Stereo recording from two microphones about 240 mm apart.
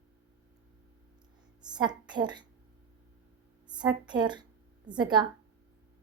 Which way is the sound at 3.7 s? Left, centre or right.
Centre.